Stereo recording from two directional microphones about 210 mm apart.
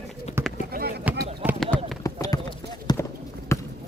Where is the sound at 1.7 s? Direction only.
5° left (ahead or behind).